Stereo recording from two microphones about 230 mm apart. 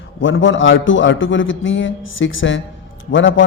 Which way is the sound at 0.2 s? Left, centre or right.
Left.